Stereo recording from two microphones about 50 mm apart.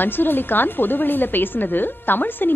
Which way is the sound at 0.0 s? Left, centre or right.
Left.